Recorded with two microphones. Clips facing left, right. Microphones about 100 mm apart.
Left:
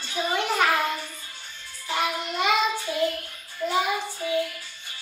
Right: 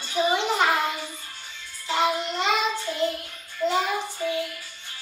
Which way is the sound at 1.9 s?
20° right (ahead or behind).